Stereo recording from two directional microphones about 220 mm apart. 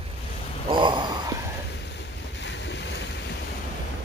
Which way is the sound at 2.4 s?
55° left (ahead or behind).